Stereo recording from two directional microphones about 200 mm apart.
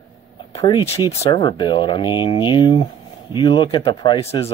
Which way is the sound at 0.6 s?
25° left (ahead or behind).